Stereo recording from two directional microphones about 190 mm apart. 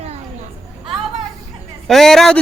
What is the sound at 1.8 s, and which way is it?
Speech, centre (ahead or behind).